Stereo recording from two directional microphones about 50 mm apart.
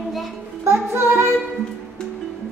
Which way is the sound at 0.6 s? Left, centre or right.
Right.